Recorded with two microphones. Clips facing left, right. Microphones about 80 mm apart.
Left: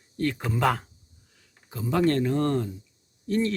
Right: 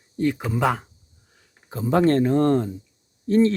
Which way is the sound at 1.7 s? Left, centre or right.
Right.